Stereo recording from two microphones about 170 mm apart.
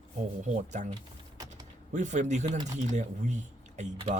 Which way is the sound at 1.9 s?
45° right (ahead or behind).